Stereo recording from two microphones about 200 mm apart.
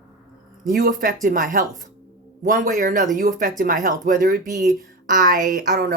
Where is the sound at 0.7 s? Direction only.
45° right (ahead or behind).